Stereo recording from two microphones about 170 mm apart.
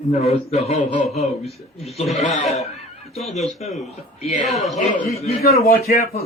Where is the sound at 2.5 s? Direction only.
40° left (ahead or behind).